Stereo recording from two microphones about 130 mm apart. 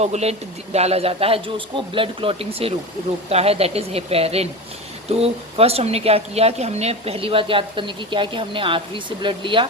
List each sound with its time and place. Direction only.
0.0 s a woman's voice: 55° right (ahead or behind); by 9.6 s 40° right (ahead or behind)